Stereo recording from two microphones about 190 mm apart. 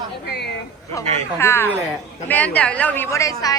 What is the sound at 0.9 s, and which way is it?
A woman's voice, 15° left (ahead or behind).